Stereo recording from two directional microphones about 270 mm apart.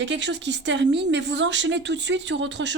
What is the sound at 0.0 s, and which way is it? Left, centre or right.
Speech, right.